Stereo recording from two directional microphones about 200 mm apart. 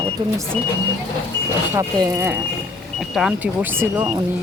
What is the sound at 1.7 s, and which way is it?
Speech, 15° right (ahead or behind).